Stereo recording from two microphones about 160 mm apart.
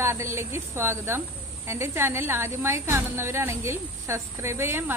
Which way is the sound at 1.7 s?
15° right (ahead or behind).